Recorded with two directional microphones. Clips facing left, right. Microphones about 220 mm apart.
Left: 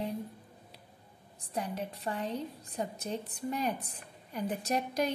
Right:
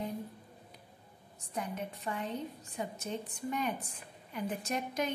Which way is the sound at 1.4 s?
35° left (ahead or behind).